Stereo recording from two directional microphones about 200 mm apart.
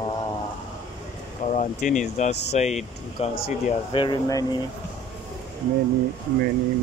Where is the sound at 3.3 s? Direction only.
50° left (ahead or behind).